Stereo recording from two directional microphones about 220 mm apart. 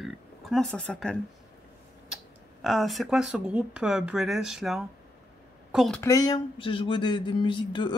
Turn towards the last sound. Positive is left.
turn(degrees=20)  # may be behind; listen again after turning